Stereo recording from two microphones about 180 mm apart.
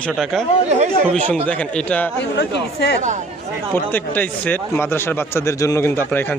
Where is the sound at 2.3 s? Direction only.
65° left (ahead or behind).